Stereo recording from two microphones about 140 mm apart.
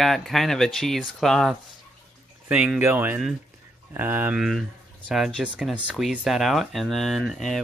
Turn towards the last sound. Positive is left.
turn(degrees=0)  # may be behind; listen again after turning